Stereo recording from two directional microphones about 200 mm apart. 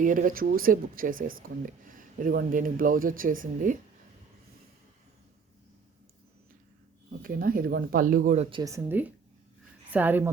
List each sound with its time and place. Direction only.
0.0 s speech: 40° right (ahead or behind)
7.2 s speech: 45° right (ahead or behind)
8.4 s speech: 20° right (ahead or behind)